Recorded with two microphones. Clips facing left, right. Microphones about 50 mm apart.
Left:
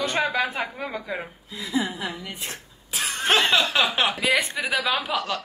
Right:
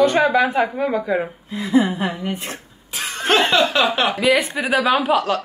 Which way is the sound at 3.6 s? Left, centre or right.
Centre.